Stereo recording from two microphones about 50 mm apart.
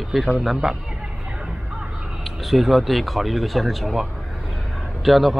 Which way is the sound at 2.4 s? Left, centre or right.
Centre.